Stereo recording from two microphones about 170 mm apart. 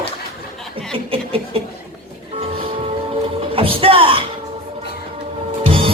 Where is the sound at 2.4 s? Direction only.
35° right (ahead or behind).